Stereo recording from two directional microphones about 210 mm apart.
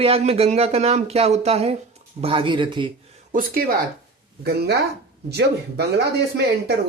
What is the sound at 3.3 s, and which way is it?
Speech, 40° right (ahead or behind).